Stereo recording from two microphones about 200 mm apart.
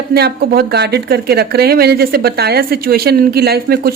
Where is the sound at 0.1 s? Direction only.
50° right (ahead or behind).